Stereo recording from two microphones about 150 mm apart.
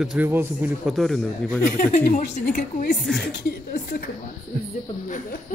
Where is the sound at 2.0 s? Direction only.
60° left (ahead or behind).